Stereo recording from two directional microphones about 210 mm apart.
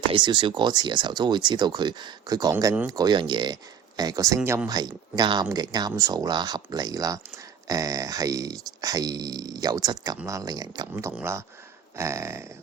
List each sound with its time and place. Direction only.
0.1 s speech: 20° right (ahead or behind)